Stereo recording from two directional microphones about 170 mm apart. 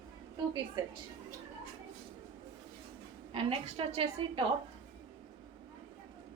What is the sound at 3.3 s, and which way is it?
A woman's voice, 35° right (ahead or behind).